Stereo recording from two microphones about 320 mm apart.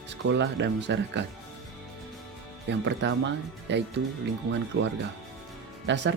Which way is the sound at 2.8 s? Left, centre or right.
Right.